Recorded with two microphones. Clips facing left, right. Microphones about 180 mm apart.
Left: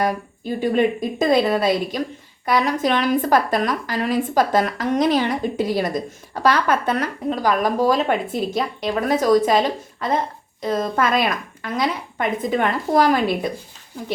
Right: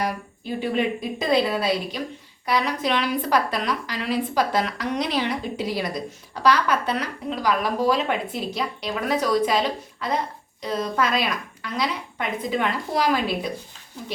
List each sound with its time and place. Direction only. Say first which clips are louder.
0.0 s a woman's voice: left 5 dB; 45° left (ahead or behind)